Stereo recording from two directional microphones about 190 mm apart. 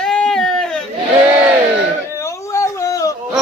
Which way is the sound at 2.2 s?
15° left (ahead or behind).